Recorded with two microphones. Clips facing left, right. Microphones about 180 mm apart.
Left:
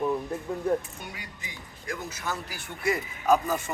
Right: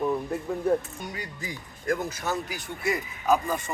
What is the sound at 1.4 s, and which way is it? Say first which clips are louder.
Speech: right 6 dB; 45° right (ahead or behind).